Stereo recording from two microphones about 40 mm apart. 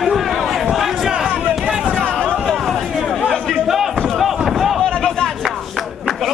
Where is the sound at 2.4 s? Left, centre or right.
Centre.